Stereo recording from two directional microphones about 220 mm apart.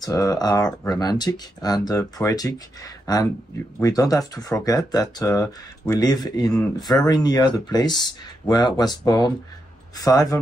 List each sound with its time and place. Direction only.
0.0 s speech: 15° left (ahead or behind)